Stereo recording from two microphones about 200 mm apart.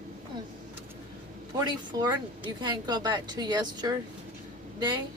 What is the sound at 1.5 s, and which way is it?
Speech, 20° right (ahead or behind).